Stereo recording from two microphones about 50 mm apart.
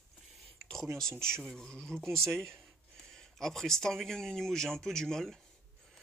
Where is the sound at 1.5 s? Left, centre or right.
Centre.